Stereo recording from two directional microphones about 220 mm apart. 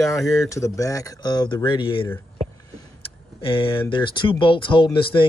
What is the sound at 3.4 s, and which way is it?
Speech, 25° left (ahead or behind).